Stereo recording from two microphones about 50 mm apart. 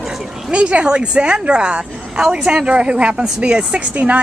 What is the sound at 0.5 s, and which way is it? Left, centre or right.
A woman's voice, right.